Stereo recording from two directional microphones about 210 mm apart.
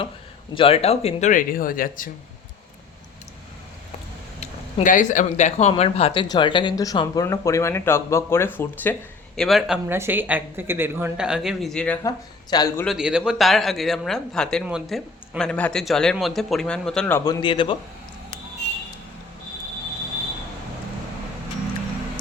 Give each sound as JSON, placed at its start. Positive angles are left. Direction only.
{"t": 0.5, "sound": "speech", "side_deg": 25}
{"t": 4.4, "sound": "speech", "side_deg": 35}
{"t": 12.0, "sound": "speech", "side_deg": 15}
{"t": 12.8, "sound": "speech", "side_deg": 0}